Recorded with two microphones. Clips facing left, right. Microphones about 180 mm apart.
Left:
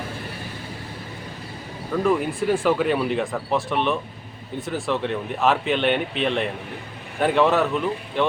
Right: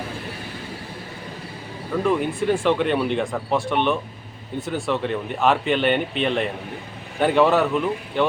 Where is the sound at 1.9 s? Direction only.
5° right (ahead or behind).